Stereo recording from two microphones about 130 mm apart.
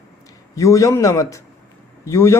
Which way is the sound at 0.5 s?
25° left (ahead or behind).